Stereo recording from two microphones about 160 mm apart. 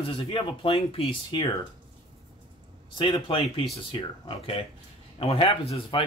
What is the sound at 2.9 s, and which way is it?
Speech, 30° left (ahead or behind).